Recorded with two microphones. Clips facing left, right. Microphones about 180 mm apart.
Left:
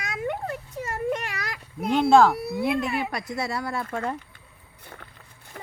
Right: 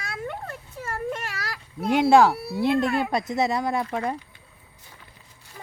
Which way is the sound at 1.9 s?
10° right (ahead or behind).